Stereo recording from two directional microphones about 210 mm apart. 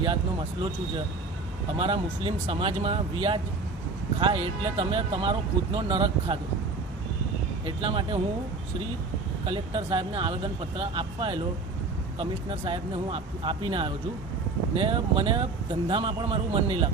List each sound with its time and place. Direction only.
0.0 s speech: 25° right (ahead or behind)
1.8 s speech: 25° right (ahead or behind)
7.6 s speech: 25° right (ahead or behind)
9.5 s speech: 25° right (ahead or behind)